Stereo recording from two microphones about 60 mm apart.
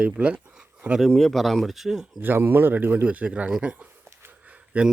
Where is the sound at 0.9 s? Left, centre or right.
Centre.